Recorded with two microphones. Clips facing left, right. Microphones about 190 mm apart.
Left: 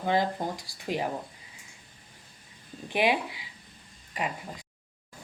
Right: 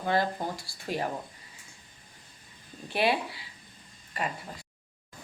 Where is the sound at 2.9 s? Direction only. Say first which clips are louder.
Left 1 dB; 15° left (ahead or behind).